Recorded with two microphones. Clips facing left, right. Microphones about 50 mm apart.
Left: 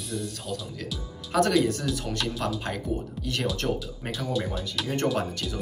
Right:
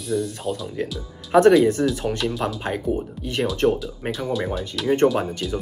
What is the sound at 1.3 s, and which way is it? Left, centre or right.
Speech, right.